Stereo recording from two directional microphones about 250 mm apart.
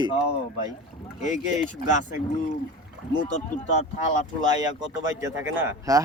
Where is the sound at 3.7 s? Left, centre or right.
Left.